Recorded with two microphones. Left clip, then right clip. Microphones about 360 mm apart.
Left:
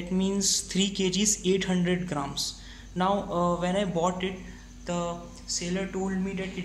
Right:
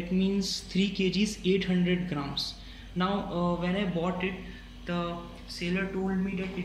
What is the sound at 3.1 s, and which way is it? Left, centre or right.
Mantra, left.